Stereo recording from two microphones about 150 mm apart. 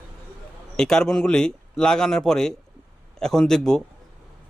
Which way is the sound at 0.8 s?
5° left (ahead or behind).